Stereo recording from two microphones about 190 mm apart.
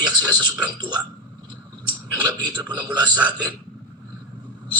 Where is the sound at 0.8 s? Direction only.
20° right (ahead or behind).